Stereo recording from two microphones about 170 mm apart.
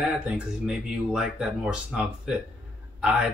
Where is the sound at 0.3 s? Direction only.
5° right (ahead or behind).